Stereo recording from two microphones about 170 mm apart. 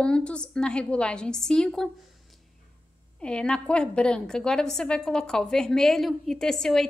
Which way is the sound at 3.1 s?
5° left (ahead or behind).